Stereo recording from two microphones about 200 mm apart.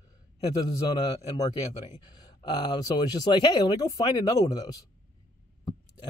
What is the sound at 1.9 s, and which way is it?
Speech, 20° left (ahead or behind).